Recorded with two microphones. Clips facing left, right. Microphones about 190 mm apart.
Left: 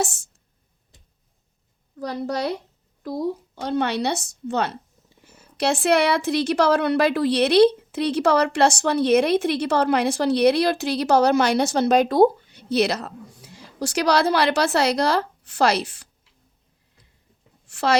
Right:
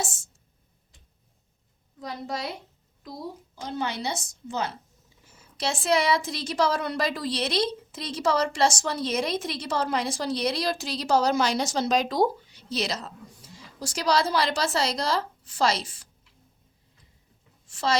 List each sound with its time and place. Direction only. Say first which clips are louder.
2.0 s a woman's voice: left 7 dB; 65° left (ahead or behind)
17.7 s a woman's voice: left 5 dB; 70° left (ahead or behind)